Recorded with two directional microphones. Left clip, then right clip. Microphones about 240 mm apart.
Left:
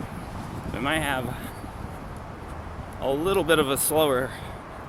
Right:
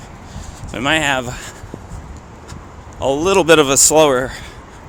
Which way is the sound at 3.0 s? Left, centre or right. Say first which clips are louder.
Right 10 dB; right.